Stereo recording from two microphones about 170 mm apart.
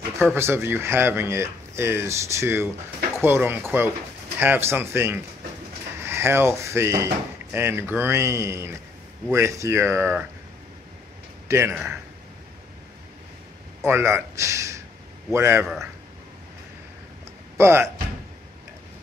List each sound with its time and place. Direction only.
0.3 s speech: 15° right (ahead or behind)
11.4 s speech: 15° right (ahead or behind)
13.8 s a man's voice: 15° right (ahead or behind)
15.6 s speech: centre (ahead or behind)
17.6 s speech: 15° right (ahead or behind)